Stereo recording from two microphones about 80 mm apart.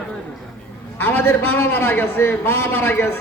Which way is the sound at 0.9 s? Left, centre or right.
Left.